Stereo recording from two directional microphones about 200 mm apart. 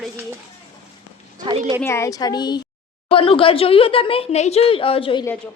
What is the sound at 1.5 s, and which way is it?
Speech, 25° right (ahead or behind).